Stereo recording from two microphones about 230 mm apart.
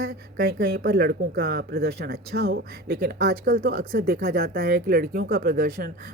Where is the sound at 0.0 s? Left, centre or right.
Right.